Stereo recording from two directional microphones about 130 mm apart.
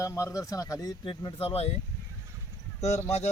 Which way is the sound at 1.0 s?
40° left (ahead or behind).